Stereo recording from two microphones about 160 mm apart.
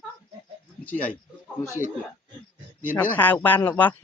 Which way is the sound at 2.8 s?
10° left (ahead or behind).